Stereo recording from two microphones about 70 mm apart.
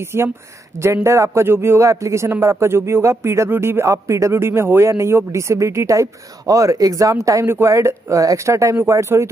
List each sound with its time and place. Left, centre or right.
0.0 s a man's voice: right
1.9 s a man's voice: right
3.4 s a man's voice: right